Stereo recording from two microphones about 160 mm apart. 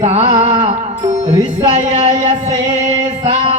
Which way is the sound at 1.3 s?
25° right (ahead or behind).